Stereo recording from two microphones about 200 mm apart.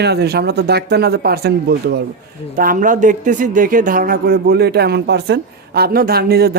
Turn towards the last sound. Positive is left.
turn(degrees=-50)  # may be behind; listen again after turning